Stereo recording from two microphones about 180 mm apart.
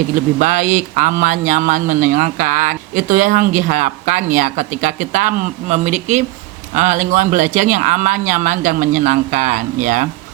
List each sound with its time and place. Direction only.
0.1 s speech: 45° right (ahead or behind)